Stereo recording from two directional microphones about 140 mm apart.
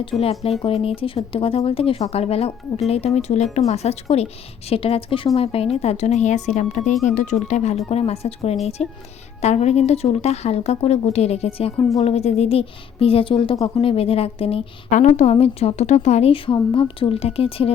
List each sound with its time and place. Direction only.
0.2 s a woman's voice: 45° left (ahead or behind)
14.8 s a woman's voice: 60° left (ahead or behind); by 17.7 s 45° left (ahead or behind)